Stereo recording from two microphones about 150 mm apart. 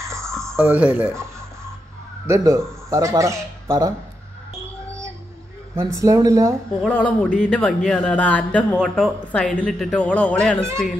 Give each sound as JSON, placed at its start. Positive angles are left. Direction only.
{"t": 0.1, "sound": "a sound", "side_deg": -20}
{"t": 0.6, "sound": "speech", "side_deg": -10}
{"t": 2.2, "sound": "speech", "side_deg": -20}
{"t": 5.9, "sound": "speech", "side_deg": -20}
{"t": 6.9, "sound": "speech", "side_deg": 10}